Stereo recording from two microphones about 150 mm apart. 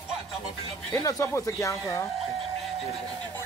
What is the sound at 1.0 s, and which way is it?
Speech, 25° left (ahead or behind).